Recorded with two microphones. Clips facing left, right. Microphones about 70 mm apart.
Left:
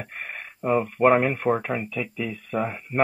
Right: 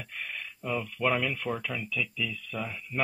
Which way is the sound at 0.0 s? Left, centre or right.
Left.